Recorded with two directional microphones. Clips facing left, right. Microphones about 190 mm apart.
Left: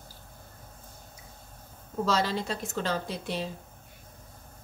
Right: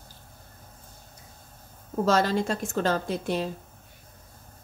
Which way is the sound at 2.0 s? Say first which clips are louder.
Right 5 dB; 45° right (ahead or behind).